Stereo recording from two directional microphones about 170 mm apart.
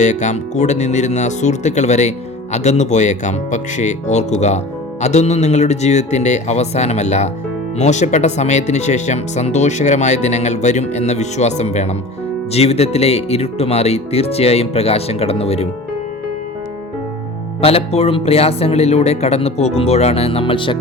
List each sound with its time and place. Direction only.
0.0 s speech: 45° left (ahead or behind)
17.6 s speech: 35° left (ahead or behind)